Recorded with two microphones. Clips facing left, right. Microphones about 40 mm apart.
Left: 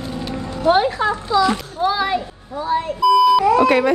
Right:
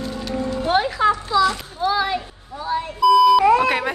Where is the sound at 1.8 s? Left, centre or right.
Centre.